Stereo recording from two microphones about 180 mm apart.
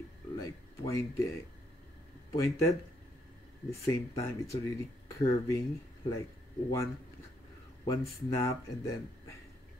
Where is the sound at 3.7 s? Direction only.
15° left (ahead or behind).